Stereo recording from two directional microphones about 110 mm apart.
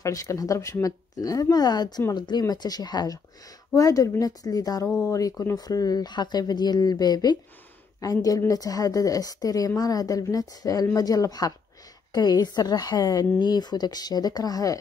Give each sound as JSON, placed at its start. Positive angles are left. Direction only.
{"t": 0.0, "sound": "a woman's voice", "side_deg": 30}